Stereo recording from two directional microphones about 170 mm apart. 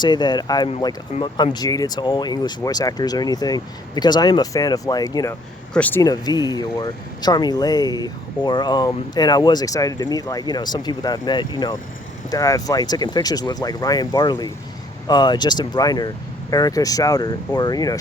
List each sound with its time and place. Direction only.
0.0 s speech: 25° left (ahead or behind)
5.7 s speech: 10° left (ahead or behind)
6.0 s speech: 25° left (ahead or behind)